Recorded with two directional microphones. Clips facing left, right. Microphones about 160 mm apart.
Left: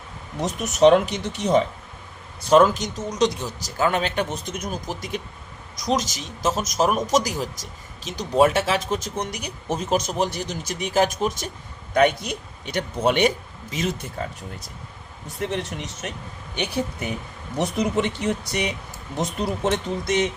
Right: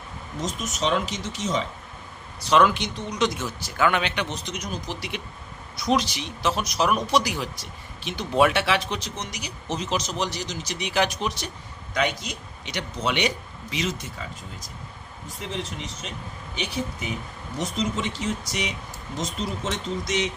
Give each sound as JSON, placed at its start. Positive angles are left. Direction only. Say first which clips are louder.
{"t": 0.3, "sound": "speech", "louder": "left 7 dB", "side_deg": 65}
{"t": 2.4, "sound": "speech", "louder": "left 4 dB", "side_deg": 45}
{"t": 15.4, "sound": "speech", "louder": "left 5 dB", "side_deg": 70}
{"t": 17.6, "sound": "speech", "louder": "left 5 dB", "side_deg": 65}